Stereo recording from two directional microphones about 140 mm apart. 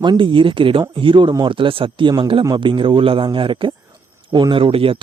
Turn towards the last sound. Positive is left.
turn(degrees=-40)  # may be behind; listen again after turning